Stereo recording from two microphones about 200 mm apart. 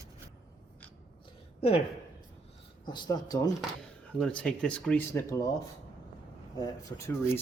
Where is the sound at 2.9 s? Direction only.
20° left (ahead or behind).